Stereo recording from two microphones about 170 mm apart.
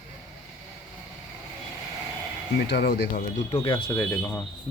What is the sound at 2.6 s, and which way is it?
Speech, 75° left (ahead or behind).